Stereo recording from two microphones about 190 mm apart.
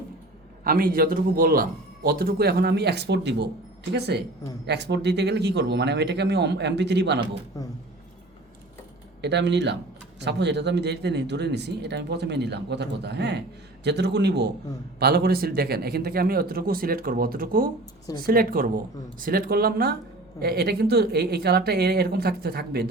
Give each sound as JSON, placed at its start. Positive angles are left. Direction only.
{"t": 0.6, "sound": "speech", "side_deg": -50}
{"t": 9.2, "sound": "speech", "side_deg": -65}